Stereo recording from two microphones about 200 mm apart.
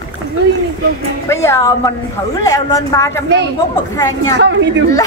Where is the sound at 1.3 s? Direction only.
15° left (ahead or behind).